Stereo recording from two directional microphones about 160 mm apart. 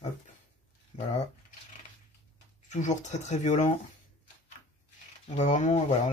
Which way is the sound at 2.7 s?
50° left (ahead or behind).